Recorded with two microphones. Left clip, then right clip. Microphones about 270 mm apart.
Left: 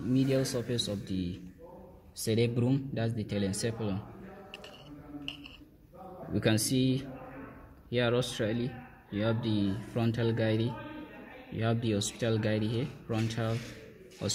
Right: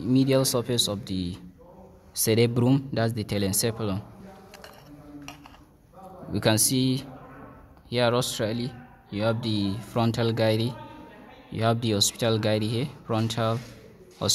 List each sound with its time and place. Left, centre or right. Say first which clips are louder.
0.1 s speech: right 7 dB; right
6.3 s a man's voice: right 6 dB; centre